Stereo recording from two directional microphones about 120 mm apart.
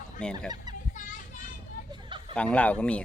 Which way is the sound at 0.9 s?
90° left.